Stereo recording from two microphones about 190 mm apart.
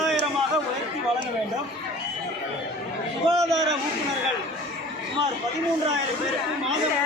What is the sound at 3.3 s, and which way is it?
Speech, centre (ahead or behind).